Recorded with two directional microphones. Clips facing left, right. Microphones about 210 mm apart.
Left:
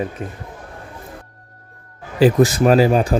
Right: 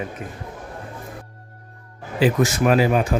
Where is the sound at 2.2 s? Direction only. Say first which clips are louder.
Left 5 dB; 35° left (ahead or behind).